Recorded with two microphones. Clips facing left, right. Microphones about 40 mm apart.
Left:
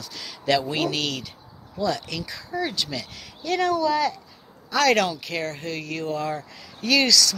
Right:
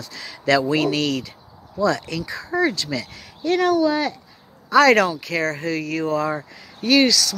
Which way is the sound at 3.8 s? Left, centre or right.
Right.